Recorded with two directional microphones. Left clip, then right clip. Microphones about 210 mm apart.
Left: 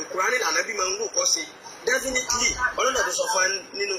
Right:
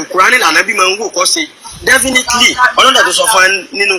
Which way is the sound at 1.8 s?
45° right (ahead or behind).